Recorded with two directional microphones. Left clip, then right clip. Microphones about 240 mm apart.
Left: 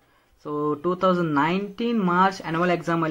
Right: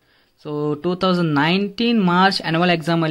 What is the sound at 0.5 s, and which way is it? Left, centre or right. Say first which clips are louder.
Speech: right 2 dB; right.